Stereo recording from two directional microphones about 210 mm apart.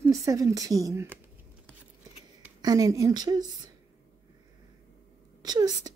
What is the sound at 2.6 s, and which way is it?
Speech, 15° right (ahead or behind).